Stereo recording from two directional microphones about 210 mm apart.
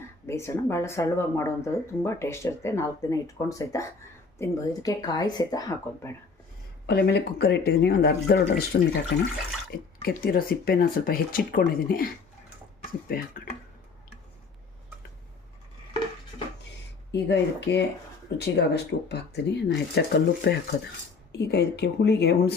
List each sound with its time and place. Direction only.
0.3 s speech: 10° left (ahead or behind)
6.8 s speech: 50° left (ahead or behind)
13.1 s speech: 45° left (ahead or behind)
17.1 s speech: 55° left (ahead or behind)